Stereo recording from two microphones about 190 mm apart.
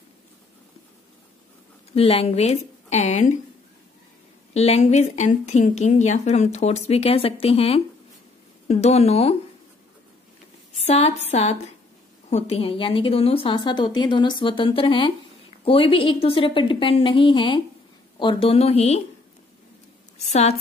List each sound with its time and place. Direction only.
2.0 s speech: 30° left (ahead or behind)
4.6 s speech: 35° left (ahead or behind)
10.7 s a woman's voice: 35° left (ahead or behind)
20.2 s speech: 35° left (ahead or behind)